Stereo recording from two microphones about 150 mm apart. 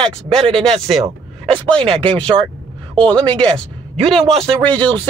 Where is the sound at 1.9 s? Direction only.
35° right (ahead or behind).